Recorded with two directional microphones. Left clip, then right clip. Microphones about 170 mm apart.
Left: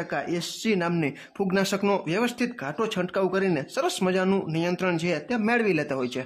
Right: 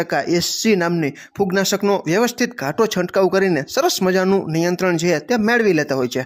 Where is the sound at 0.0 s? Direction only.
30° right (ahead or behind).